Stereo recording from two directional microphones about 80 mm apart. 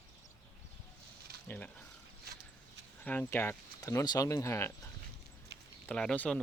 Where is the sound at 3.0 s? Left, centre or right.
Centre.